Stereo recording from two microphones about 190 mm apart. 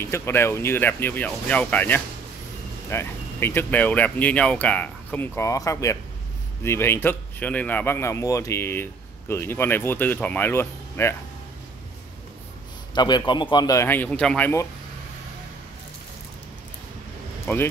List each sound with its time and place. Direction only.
0.0 s speech: 15° left (ahead or behind)
12.9 s speech: 20° left (ahead or behind)
17.5 s speech: 10° left (ahead or behind)